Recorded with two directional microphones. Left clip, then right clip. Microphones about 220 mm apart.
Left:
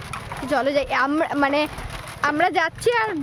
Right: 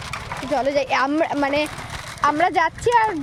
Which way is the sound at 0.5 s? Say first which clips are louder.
Even; 20° left (ahead or behind).